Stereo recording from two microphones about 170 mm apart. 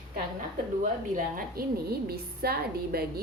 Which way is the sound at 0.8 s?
50° right (ahead or behind).